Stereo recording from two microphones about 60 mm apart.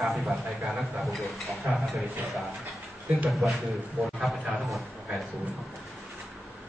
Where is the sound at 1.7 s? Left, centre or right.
Right.